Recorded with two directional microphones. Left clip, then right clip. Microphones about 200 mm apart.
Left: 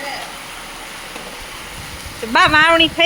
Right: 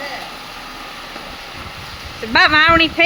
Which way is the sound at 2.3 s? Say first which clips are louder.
Even; 25° right (ahead or behind).